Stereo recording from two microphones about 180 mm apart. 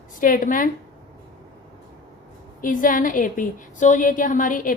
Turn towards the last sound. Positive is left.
turn(degrees=45)  # may be behind; listen again after turning